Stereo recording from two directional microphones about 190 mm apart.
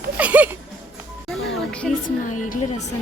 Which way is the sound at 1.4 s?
5° left (ahead or behind).